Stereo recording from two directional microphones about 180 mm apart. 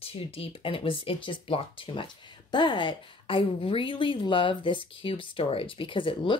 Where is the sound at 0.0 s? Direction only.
30° left (ahead or behind).